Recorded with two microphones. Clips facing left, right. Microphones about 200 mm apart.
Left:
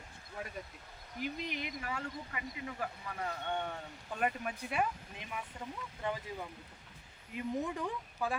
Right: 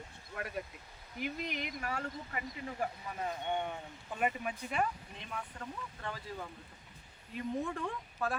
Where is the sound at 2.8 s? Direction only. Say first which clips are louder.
Right 4 dB; 20° right (ahead or behind).